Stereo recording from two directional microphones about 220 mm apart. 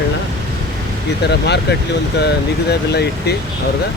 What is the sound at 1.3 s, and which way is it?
Speech, 50° left (ahead or behind).